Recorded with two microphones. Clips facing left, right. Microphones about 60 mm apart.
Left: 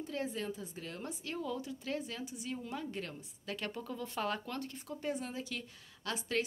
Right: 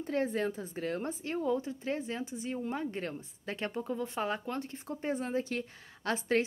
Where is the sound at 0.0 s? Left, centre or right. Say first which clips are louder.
Right 7 dB; right.